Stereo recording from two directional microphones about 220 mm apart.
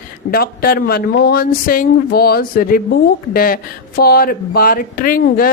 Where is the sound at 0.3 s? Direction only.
40° left (ahead or behind).